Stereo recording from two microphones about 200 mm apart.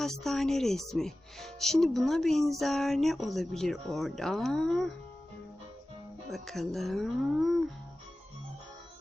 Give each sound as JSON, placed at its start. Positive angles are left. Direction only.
{"t": 0.0, "sound": "speech", "side_deg": 0}
{"t": 6.3, "sound": "speech", "side_deg": 0}